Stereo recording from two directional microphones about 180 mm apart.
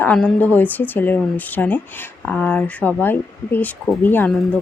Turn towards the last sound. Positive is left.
turn(degrees=10)  # may be behind; listen again after turning